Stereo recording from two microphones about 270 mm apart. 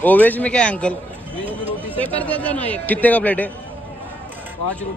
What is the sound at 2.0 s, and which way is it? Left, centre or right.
A man's voice, centre.